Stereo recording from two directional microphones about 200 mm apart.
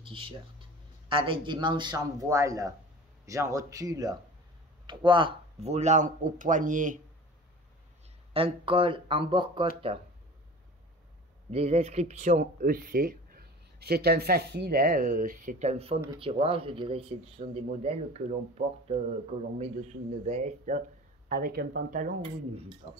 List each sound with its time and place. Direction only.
0.0 s a man's voice: 25° right (ahead or behind)
8.3 s speech: 25° right (ahead or behind)
11.5 s speech: 30° right (ahead or behind)
21.3 s speech: 50° right (ahead or behind)